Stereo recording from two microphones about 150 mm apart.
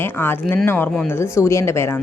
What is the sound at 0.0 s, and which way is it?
A woman's voice, 15° left (ahead or behind).